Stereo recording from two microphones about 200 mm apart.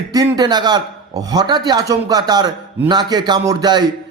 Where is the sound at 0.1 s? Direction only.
20° right (ahead or behind).